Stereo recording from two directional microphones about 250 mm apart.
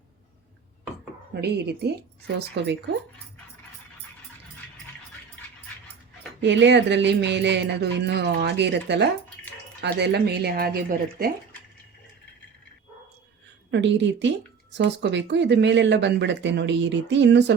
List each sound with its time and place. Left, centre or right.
1.4 s speech: right
6.4 s speech: right
13.7 s speech: right